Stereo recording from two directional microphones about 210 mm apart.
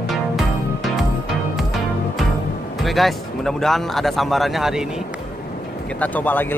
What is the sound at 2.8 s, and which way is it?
A man's voice, centre (ahead or behind).